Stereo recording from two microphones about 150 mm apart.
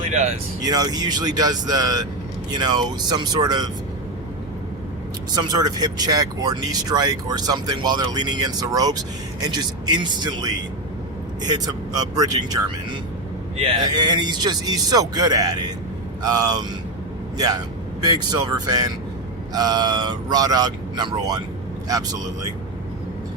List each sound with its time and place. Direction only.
0.1 s speech: 50° right (ahead or behind)
0.6 s speech: 25° right (ahead or behind)
5.3 s speech: 25° right (ahead or behind)